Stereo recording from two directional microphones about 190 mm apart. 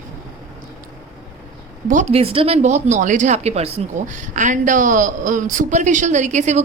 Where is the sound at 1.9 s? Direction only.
40° right (ahead or behind).